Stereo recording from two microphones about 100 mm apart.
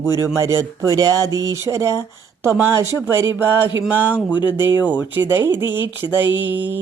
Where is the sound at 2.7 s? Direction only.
25° right (ahead or behind).